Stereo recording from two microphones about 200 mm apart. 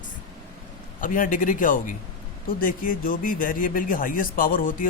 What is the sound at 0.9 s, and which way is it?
A man's voice, 40° left (ahead or behind).